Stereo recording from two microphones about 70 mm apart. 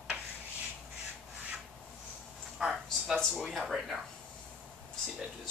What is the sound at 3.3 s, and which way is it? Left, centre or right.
Speech, centre.